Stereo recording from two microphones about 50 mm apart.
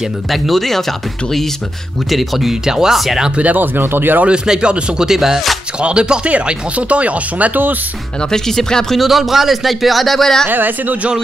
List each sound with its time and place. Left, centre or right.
0.3 s a man's voice: centre
3.3 s speech: right
4.3 s speech: centre
5.8 s speech: centre
8.2 s speech: centre
8.9 s a man's voice: centre
10.5 s speech: right